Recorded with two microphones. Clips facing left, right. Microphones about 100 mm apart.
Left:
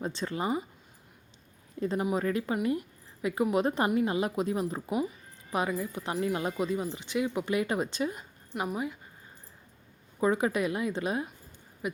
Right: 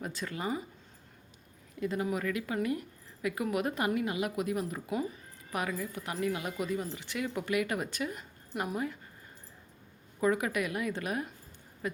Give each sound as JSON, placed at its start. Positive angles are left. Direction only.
{"t": 0.0, "sound": "a woman's voice", "side_deg": 25}
{"t": 1.8, "sound": "a woman's voice", "side_deg": 30}
{"t": 8.5, "sound": "a woman's voice", "side_deg": 10}
{"t": 10.2, "sound": "a woman's voice", "side_deg": 25}